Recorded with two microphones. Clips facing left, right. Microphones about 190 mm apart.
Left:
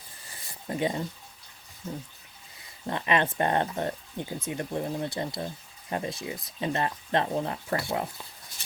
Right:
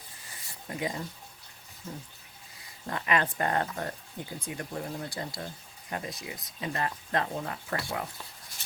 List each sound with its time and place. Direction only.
0.7 s speech: 30° left (ahead or behind)
2.8 s speech: 25° left (ahead or behind)